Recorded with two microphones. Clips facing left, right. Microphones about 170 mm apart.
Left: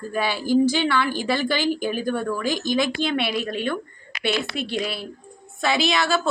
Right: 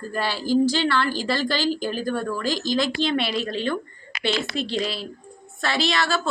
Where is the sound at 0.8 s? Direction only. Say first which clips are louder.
Even; 10° left (ahead or behind).